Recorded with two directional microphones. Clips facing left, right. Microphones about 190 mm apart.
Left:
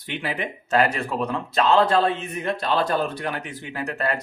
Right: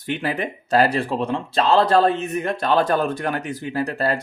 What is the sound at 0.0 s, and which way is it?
Speech, 45° right (ahead or behind).